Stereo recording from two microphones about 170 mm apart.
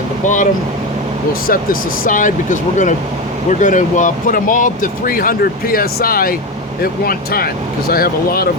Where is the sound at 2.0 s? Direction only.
50° left (ahead or behind).